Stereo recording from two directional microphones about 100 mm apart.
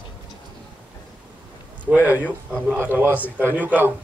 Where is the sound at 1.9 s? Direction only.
15° right (ahead or behind).